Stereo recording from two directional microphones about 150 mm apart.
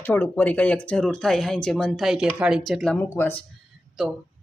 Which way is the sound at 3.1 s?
15° left (ahead or behind).